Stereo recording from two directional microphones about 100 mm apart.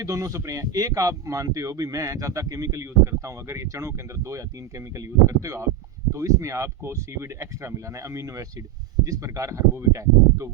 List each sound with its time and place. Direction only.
0.0 s speech: 30° right (ahead or behind)